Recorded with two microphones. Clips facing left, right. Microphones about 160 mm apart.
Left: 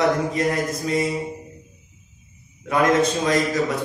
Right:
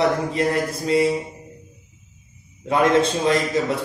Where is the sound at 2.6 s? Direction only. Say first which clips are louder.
Right 1 dB; 25° right (ahead or behind).